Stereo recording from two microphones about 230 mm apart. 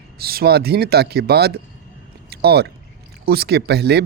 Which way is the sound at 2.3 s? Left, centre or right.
Right.